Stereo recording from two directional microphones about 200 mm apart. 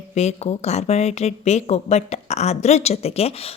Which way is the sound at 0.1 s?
35° left (ahead or behind).